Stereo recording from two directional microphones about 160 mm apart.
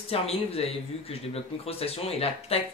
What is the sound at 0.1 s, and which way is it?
Speech, 40° left (ahead or behind).